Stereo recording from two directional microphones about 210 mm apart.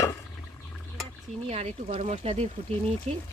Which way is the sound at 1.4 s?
30° right (ahead or behind).